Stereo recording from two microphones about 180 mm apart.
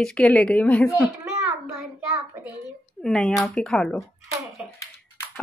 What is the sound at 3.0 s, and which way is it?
Speech, 5° left (ahead or behind).